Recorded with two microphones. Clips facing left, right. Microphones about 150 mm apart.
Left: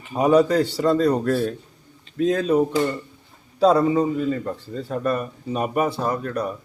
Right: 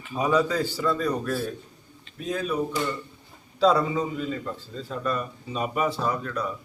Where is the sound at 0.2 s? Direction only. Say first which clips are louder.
Left 7 dB; 60° left (ahead or behind).